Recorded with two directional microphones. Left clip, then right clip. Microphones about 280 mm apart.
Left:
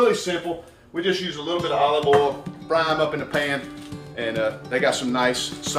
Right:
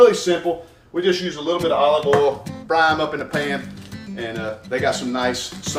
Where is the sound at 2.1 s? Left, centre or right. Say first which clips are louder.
Left 2 dB; centre.